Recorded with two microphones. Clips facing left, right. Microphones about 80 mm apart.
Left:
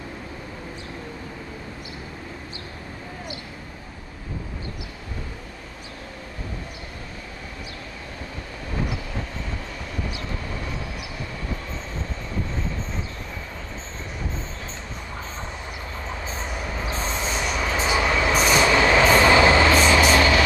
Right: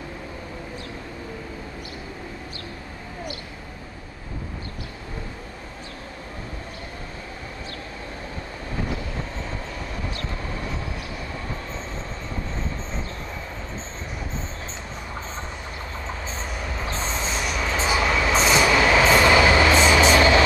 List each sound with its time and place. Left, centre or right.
16.3 s vehicle: centre
16.8 s train: centre
18.6 s train: centre
19.3 s train: left
19.7 s vehicle: right